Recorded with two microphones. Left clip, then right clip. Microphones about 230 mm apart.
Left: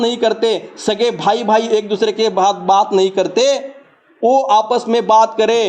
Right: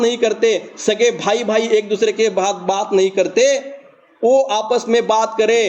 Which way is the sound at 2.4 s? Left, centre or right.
Left.